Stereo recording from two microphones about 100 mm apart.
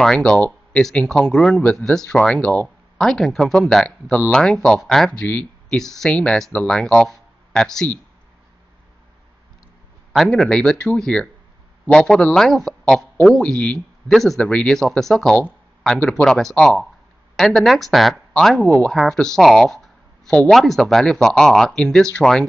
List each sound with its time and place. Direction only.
0.0 s speech: 5° left (ahead or behind)
10.1 s speech: 5° left (ahead or behind)